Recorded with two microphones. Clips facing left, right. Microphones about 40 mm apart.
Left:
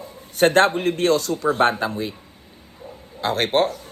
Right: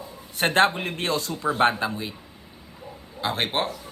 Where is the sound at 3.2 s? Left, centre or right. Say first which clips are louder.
Left 6 dB; centre.